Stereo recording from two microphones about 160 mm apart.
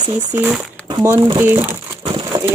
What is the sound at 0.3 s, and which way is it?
Speech, 10° right (ahead or behind).